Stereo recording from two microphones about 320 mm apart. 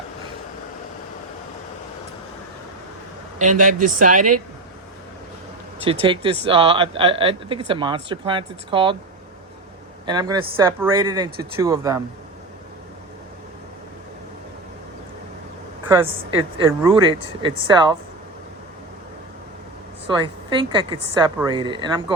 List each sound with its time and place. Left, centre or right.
3.3 s speech: right
5.8 s speech: centre
10.1 s speech: centre
16.3 s speech: centre
20.1 s speech: centre